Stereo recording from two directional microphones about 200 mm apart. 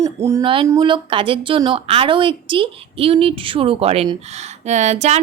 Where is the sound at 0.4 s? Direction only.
25° right (ahead or behind).